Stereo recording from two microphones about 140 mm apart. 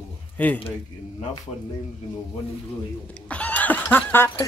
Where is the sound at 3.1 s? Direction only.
10° left (ahead or behind).